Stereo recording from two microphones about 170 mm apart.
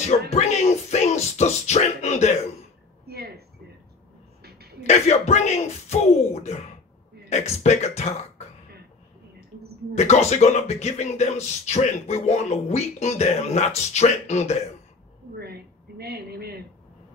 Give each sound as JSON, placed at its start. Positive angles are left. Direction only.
{"t": 0.3, "sound": "music", "side_deg": 40}
{"t": 3.1, "sound": "a sound", "side_deg": -65}
{"t": 4.8, "sound": "speech", "side_deg": 40}
{"t": 7.2, "sound": "speech", "side_deg": 40}
{"t": 9.9, "sound": "speech", "side_deg": 40}
{"t": 15.3, "sound": "a sound", "side_deg": -70}